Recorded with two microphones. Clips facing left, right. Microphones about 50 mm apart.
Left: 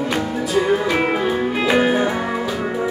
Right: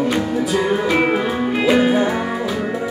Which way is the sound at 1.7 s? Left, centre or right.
Centre.